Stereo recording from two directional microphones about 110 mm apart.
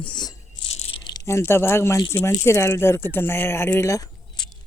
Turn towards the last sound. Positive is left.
turn(degrees=40)  # may be behind; listen again after turning